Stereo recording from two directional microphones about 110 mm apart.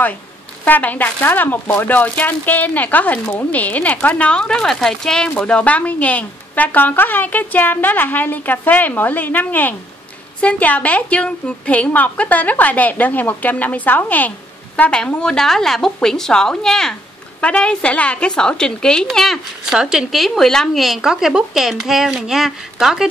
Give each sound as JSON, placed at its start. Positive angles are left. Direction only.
{"t": 0.7, "sound": "speech", "side_deg": 15}